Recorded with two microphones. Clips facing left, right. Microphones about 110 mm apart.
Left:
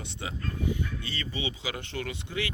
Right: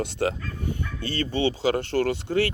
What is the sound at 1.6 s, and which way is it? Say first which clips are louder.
Speech: right 12 dB; 60° right (ahead or behind).